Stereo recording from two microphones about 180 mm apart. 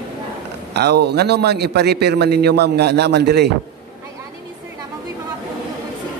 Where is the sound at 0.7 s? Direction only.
65° right (ahead or behind).